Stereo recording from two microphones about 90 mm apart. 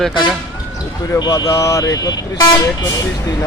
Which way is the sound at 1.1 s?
45° left (ahead or behind).